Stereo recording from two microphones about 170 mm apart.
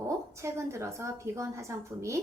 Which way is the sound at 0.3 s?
15° right (ahead or behind).